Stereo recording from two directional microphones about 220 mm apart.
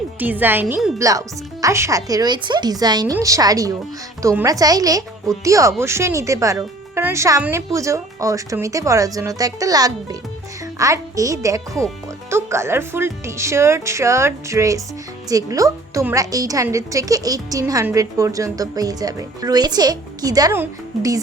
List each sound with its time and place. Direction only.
0.2 s a woman's voice: 10° right (ahead or behind)